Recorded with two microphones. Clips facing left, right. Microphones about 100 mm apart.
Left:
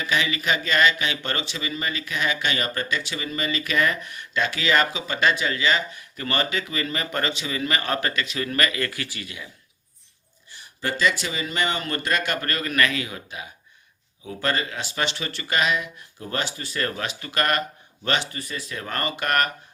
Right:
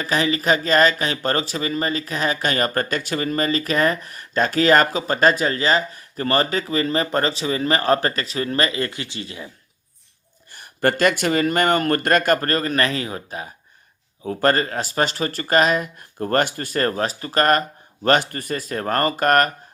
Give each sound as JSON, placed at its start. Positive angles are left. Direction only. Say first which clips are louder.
{"t": 0.0, "sound": "speech", "louder": "right 4 dB", "side_deg": -40}
{"t": 10.5, "sound": "speech", "louder": "right 9 dB", "side_deg": -55}